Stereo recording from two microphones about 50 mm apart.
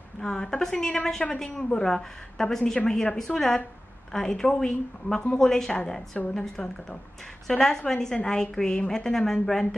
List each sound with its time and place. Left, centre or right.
0.2 s a woman's voice: centre